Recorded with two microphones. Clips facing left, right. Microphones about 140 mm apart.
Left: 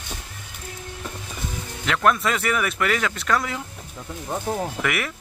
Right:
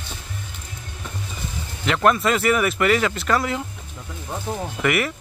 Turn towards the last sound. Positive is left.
turn(degrees=0)  # may be behind; listen again after turning